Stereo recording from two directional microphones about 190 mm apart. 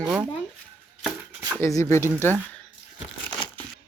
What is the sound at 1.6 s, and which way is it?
Speech, 15° left (ahead or behind).